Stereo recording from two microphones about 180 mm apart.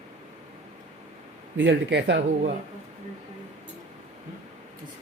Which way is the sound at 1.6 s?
80° right.